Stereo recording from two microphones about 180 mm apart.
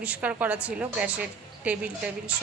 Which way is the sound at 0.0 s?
10° right (ahead or behind).